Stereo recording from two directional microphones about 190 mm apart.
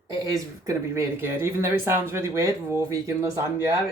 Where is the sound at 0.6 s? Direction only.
10° right (ahead or behind).